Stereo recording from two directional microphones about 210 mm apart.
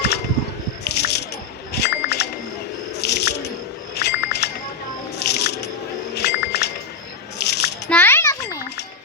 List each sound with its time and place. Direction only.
0.0 s music: 50° left (ahead or behind)
0.9 s squish: 50° left (ahead or behind)
1.7 s chink: 50° left (ahead or behind)
3.0 s squish: 50° left (ahead or behind)
3.9 s wind chime: 50° left (ahead or behind)
5.2 s music: 50° left (ahead or behind)
6.1 s a sound: 50° left (ahead or behind)
7.9 s a sound: 10° left (ahead or behind)